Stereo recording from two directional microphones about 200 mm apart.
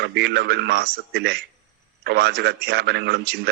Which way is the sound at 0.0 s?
55° right (ahead or behind).